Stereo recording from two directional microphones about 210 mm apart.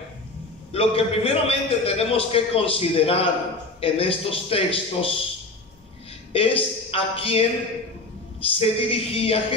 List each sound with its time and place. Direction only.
0.7 s a man's voice: 25° left (ahead or behind)
6.3 s a man's voice: 25° left (ahead or behind)